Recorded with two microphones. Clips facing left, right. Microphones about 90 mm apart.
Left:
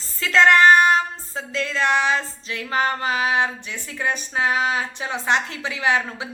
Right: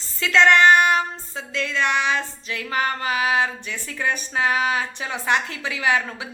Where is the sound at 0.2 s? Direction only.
35° left (ahead or behind).